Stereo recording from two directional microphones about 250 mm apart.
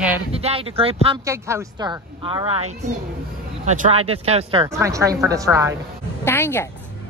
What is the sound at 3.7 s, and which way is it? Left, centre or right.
A woman's voice, right.